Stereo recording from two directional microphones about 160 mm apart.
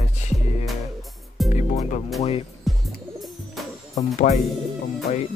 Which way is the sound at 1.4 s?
45° left (ahead or behind).